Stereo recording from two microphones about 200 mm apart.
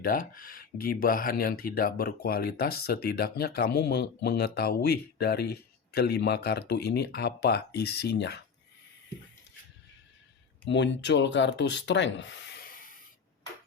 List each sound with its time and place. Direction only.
0.0 s speech: 45° left (ahead or behind)
10.7 s speech: 60° left (ahead or behind)
12.6 s spray: 45° left (ahead or behind)